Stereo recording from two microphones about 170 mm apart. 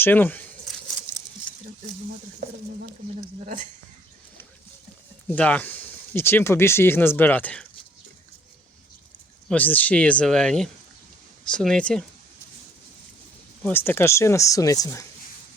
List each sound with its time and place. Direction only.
0.0 s speech: 10° left (ahead or behind)
0.7 s a sound: centre (ahead or behind)
3.4 s speech: 50° right (ahead or behind)
5.3 s speech: 10° left (ahead or behind)
9.5 s speech: 10° left (ahead or behind)
13.6 s speech: 10° left (ahead or behind)